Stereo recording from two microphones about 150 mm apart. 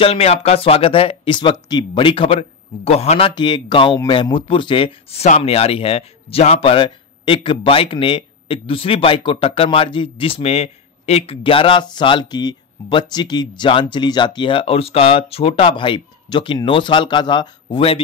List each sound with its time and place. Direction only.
0.0 s speech: 45° left (ahead or behind)